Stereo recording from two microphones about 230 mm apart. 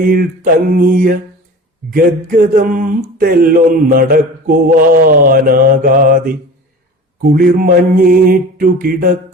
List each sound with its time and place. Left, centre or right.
0.0 s speech: right